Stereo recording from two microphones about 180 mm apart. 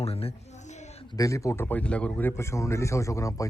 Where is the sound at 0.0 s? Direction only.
35° left (ahead or behind).